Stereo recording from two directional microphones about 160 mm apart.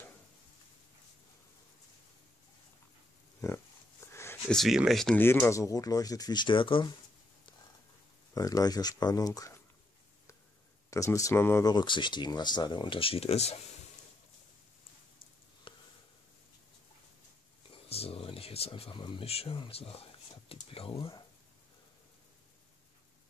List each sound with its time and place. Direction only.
3.3 s a sound: 15° left (ahead or behind)
4.5 s speech: centre (ahead or behind); by 6.9 s 30° left (ahead or behind)
8.4 s speech: 25° left (ahead or behind)
10.9 s speech: 20° left (ahead or behind)
11.7 s speech: 30° left (ahead or behind)
15.7 s a sound: 35° left (ahead or behind)
17.8 s speech: 40° left (ahead or behind)